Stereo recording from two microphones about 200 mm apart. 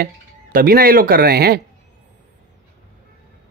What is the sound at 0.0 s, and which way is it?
Speech, 45° right (ahead or behind).